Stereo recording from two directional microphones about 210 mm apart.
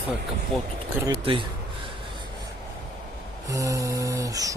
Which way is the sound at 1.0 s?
25° right (ahead or behind).